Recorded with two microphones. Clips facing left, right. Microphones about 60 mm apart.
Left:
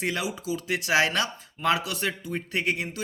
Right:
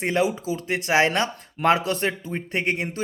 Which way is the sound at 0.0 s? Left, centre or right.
Right.